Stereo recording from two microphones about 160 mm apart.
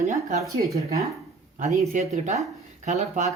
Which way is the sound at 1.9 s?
40° right (ahead or behind).